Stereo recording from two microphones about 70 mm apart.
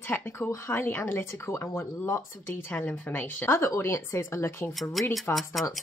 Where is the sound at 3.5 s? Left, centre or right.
Left.